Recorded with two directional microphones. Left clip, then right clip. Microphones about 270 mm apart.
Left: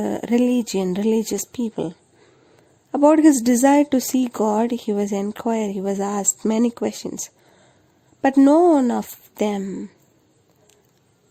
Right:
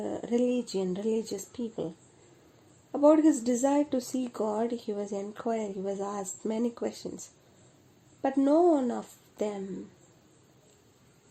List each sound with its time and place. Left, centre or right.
0.0 s a woman's voice: left
2.9 s a woman's voice: left
8.2 s a woman's voice: left